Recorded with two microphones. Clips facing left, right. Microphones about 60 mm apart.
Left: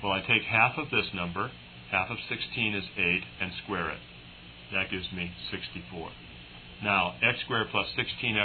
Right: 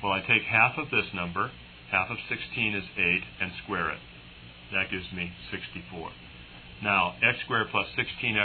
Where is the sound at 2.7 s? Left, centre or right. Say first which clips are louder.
Right 2 dB; centre.